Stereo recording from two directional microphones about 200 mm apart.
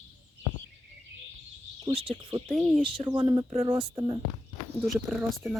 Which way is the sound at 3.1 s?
20° right (ahead or behind).